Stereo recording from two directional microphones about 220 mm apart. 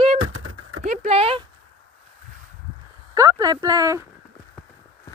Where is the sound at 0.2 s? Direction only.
75° right (ahead or behind).